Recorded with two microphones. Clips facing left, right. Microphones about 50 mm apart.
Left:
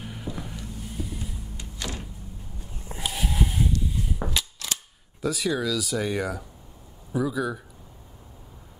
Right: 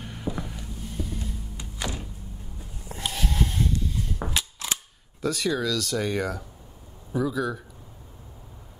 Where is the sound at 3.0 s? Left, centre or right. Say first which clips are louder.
Even; centre.